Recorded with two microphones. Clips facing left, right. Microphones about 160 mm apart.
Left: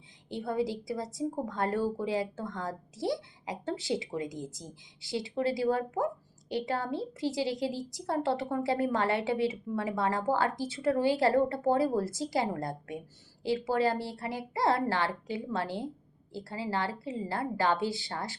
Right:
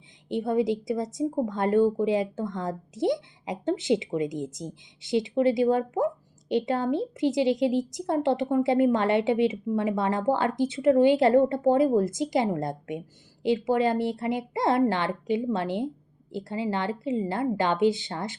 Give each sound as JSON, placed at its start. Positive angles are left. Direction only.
{"t": 0.3, "sound": "a woman's voice", "side_deg": -20}